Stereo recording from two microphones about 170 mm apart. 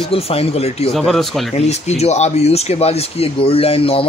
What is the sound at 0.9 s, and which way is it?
Speech, centre (ahead or behind).